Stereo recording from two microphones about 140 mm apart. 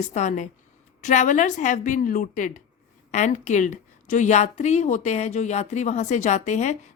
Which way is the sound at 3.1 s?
60° left (ahead or behind).